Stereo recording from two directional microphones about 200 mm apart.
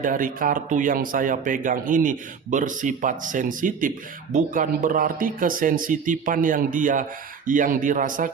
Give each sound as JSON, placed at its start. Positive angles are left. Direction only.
{"t": 0.0, "sound": "speech", "side_deg": -45}